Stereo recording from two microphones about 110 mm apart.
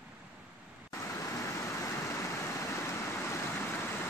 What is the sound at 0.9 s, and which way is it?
Waterfall, 30° left (ahead or behind).